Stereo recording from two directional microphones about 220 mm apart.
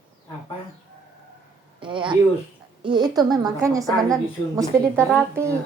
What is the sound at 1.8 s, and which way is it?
A woman's voice, 20° right (ahead or behind).